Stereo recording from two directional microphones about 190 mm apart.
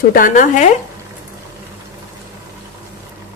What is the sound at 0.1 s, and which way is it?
Speech, 45° left (ahead or behind).